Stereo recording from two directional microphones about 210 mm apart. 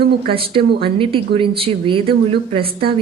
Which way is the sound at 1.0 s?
25° right (ahead or behind).